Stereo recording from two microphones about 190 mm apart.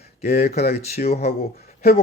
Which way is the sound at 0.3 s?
55° left (ahead or behind).